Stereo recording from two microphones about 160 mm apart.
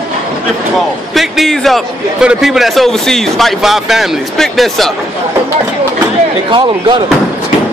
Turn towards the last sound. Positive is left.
turn(degrees=-30)  # may be behind; listen again after turning